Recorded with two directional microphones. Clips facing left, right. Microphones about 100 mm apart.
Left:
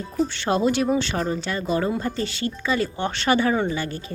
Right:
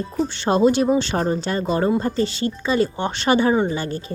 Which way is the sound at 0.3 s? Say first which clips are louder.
Right 8 dB; 25° right (ahead or behind).